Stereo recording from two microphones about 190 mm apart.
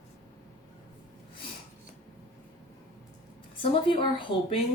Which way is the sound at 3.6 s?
25° left (ahead or behind).